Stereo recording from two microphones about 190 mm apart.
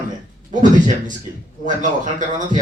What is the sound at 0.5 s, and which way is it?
Speech, 40° right (ahead or behind).